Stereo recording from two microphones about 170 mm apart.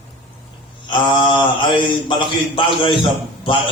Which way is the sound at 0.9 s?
30° left (ahead or behind).